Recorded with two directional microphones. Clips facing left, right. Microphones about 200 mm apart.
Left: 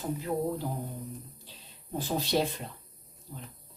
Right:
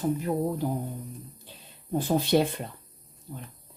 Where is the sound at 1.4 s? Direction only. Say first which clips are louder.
Right 3 dB; 55° right (ahead or behind).